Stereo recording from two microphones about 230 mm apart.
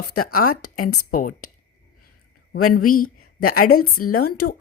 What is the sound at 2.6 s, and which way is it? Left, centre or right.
Speech, left.